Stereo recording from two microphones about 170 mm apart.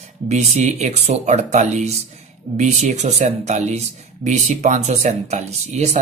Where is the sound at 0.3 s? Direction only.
40° right (ahead or behind).